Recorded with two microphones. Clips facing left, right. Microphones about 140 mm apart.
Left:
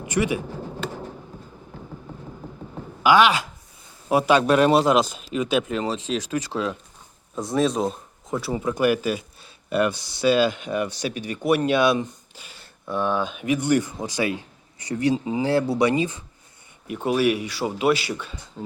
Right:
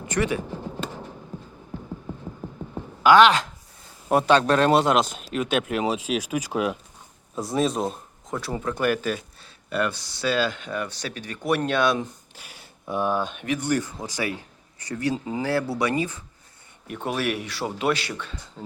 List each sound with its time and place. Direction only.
0.1 s speech: 10° left (ahead or behind)
3.0 s speech: 5° left (ahead or behind); by 6.7 s 10° right (ahead or behind)
7.3 s speech: centre (ahead or behind)
12.0 s speech: 5° right (ahead or behind)
13.4 s speech: 15° left (ahead or behind)
16.8 s speech: 5° left (ahead or behind)